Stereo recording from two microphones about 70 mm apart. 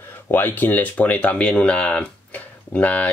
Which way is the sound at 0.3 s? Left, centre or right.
Left.